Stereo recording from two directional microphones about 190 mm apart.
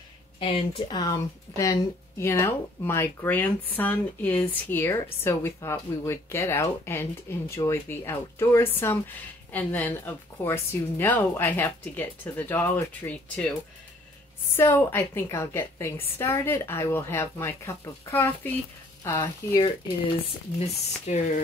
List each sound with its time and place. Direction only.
0.4 s speech: 30° left (ahead or behind)
20.5 s speech: 35° left (ahead or behind)